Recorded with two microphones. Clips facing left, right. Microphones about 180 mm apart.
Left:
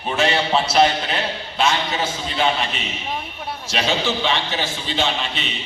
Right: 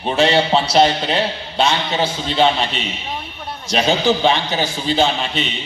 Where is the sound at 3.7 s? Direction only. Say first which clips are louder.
Right 6 dB; 35° right (ahead or behind).